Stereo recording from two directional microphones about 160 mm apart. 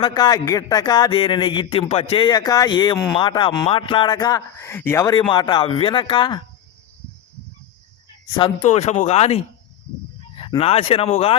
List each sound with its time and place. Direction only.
0.0 s a man's voice: 25° left (ahead or behind)
5.3 s a man's voice: 30° left (ahead or behind)
8.6 s speech: 45° left (ahead or behind)